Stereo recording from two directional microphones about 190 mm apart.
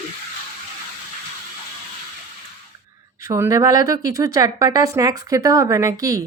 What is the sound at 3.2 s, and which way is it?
Speech, 15° right (ahead or behind).